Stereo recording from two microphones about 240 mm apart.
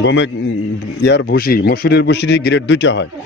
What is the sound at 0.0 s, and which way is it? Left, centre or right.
Speech, left.